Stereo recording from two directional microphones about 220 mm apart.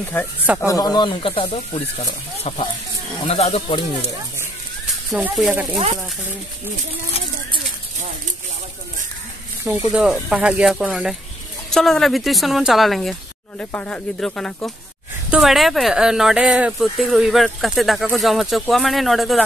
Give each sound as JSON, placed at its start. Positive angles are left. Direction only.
{"t": 0.2, "sound": "speech", "side_deg": 10}
{"t": 3.3, "sound": "speech", "side_deg": 30}
{"t": 4.4, "sound": "a sound", "side_deg": -5}
{"t": 5.7, "sound": "speech", "side_deg": -25}
{"t": 9.7, "sound": "speech", "side_deg": -5}